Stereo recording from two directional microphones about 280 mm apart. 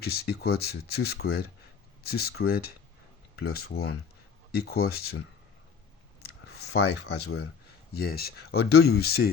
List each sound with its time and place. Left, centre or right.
0.0 s speech: left
6.5 s speech: left